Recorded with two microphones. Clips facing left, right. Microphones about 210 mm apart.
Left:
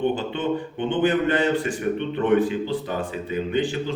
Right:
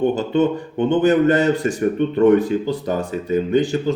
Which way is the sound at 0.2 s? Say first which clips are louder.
Right 7 dB; 40° right (ahead or behind).